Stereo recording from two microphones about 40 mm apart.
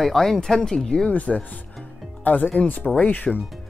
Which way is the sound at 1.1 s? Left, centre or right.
Left.